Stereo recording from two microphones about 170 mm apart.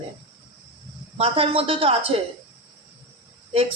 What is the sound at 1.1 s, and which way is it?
Speech, 35° right (ahead or behind).